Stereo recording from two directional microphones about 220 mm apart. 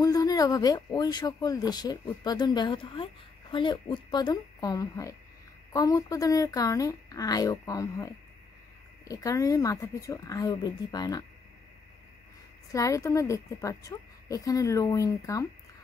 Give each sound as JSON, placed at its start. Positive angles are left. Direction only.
{"t": 0.0, "sound": "speech", "side_deg": 15}
{"t": 12.7, "sound": "speech", "side_deg": 15}